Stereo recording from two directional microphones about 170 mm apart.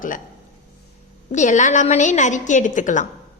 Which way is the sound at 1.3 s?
45° left (ahead or behind).